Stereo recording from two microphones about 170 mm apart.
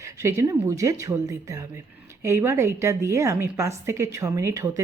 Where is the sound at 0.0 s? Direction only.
15° right (ahead or behind).